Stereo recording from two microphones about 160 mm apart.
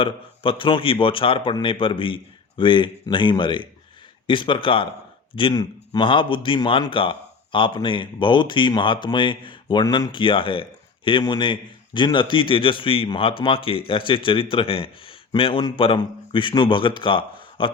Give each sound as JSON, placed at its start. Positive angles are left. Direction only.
{"t": 0.0, "sound": "a man's voice", "side_deg": 35}